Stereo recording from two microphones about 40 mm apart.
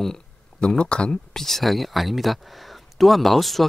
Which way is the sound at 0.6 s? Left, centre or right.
Left.